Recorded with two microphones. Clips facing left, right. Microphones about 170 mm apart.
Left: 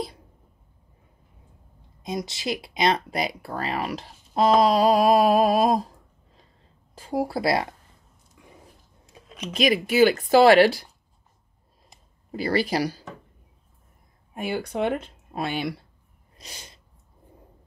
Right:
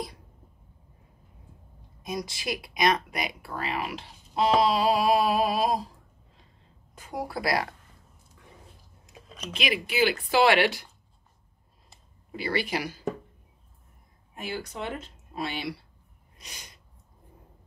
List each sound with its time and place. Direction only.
2.0 s speech: 25° left (ahead or behind); by 5.9 s 50° left (ahead or behind)
7.0 s speech: 30° left (ahead or behind)
9.5 s speech: 40° left (ahead or behind)
12.3 s speech: 40° left (ahead or behind)
14.3 s speech: 55° left (ahead or behind)
16.3 s sneeze: 30° left (ahead or behind)